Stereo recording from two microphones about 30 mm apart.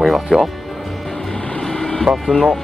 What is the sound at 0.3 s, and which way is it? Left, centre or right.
Speech, right.